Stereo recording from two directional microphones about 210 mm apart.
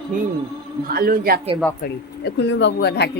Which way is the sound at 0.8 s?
45° right (ahead or behind).